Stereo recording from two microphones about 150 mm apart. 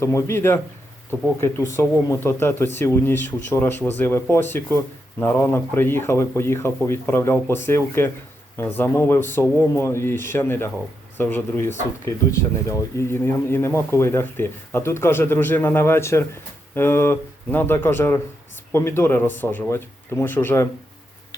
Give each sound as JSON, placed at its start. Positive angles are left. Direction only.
{"t": 0.0, "sound": "speech", "side_deg": 20}